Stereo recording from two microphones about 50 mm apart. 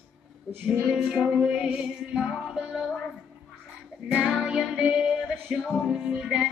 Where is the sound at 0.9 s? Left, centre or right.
Centre.